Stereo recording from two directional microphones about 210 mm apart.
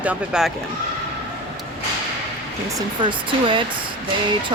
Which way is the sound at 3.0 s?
25° right (ahead or behind).